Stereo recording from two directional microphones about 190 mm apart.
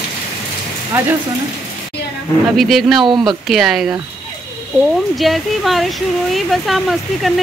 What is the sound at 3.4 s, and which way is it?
Speech, centre (ahead or behind).